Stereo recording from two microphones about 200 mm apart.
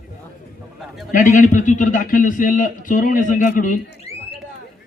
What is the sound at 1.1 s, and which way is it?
A man's voice, 40° left (ahead or behind).